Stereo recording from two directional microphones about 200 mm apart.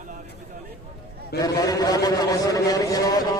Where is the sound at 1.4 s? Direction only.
20° left (ahead or behind).